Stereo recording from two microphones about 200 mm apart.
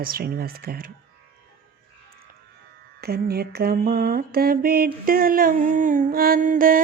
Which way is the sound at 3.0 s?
50° right (ahead or behind).